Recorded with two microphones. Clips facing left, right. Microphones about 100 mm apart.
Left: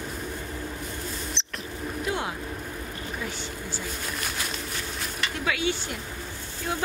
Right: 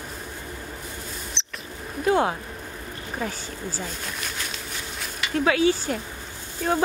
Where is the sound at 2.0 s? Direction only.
40° right (ahead or behind).